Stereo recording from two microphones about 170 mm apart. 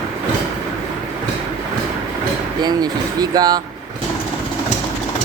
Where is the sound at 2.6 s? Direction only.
20° right (ahead or behind).